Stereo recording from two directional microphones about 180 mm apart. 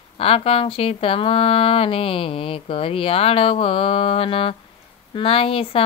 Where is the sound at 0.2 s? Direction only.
30° left (ahead or behind).